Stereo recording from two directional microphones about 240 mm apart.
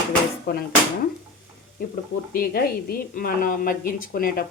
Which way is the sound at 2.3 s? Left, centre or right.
Left.